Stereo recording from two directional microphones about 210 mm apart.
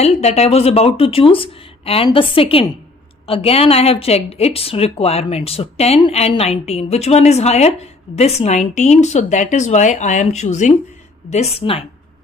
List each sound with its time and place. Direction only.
0.0 s a woman's voice: 30° left (ahead or behind)